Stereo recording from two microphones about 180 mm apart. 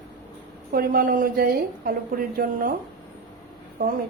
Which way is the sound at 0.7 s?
55° right (ahead or behind).